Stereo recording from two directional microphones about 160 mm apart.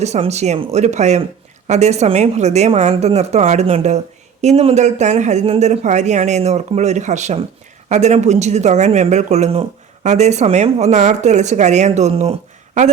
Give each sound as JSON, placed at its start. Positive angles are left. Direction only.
{"t": 0.0, "sound": "speech", "side_deg": -45}